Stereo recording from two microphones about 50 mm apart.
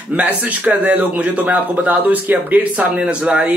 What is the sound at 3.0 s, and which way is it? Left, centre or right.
Speech, right.